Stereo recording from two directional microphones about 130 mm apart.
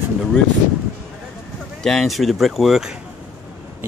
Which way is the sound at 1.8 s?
Centre (ahead or behind).